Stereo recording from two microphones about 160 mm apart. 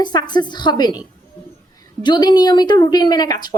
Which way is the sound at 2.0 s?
25° left (ahead or behind).